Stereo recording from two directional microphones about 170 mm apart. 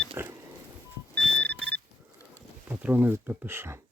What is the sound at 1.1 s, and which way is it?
Alarm clock, 5° left (ahead or behind).